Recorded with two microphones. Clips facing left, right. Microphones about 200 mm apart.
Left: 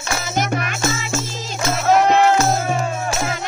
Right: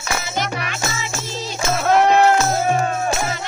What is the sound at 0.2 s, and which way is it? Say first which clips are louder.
Music: left 3 dB; 50° left (ahead or behind).